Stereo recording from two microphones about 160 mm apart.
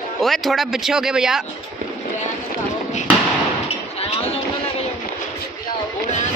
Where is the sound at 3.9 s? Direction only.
40° left (ahead or behind).